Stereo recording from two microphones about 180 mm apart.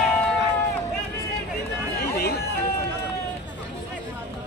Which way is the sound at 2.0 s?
65° left (ahead or behind).